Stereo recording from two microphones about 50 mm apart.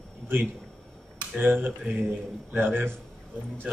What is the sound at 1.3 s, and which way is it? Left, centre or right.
A man's voice, right.